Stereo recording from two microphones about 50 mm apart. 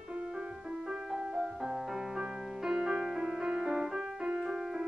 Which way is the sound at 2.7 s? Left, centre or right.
Centre.